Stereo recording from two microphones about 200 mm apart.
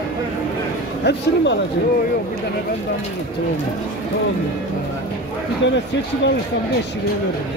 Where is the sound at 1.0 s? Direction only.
60° left (ahead or behind).